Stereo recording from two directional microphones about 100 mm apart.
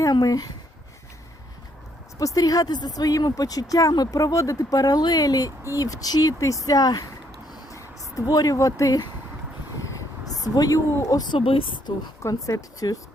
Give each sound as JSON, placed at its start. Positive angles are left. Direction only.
{"t": 0.0, "sound": "speech", "side_deg": 40}
{"t": 2.1, "sound": "speech", "side_deg": 35}
{"t": 7.5, "sound": "a sound", "side_deg": 35}
{"t": 10.4, "sound": "speech", "side_deg": 35}
{"t": 11.3, "sound": "speech", "side_deg": 65}
{"t": 12.2, "sound": "speech", "side_deg": 40}